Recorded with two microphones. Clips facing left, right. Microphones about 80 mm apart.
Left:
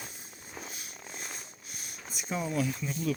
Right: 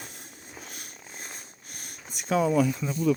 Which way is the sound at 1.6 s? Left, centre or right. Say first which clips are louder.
Right 2 dB; right.